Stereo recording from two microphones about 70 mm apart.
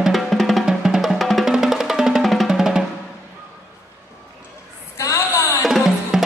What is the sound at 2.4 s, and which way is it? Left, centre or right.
Drum, centre.